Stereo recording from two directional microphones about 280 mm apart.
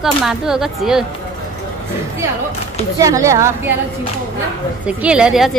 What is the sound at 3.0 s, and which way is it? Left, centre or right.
Speech, centre.